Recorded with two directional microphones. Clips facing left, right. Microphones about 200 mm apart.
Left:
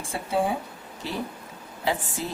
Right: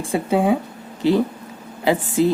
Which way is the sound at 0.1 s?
90° right.